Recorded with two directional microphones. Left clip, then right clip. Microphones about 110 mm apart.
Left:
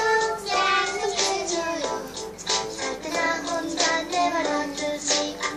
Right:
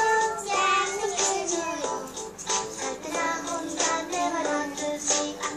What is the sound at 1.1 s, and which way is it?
Music, 10° right (ahead or behind).